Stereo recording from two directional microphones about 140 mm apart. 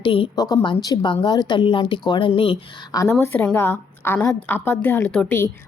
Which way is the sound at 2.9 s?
25° left (ahead or behind).